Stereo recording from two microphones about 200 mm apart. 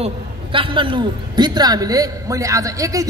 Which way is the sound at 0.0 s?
25° right (ahead or behind).